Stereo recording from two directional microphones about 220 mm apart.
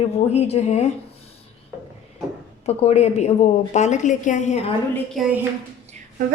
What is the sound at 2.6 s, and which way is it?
A woman's voice, 30° left (ahead or behind).